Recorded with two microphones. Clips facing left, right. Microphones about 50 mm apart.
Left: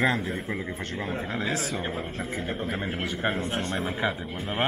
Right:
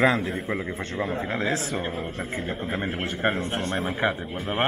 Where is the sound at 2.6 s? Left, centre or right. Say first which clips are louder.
Right 2 dB; centre.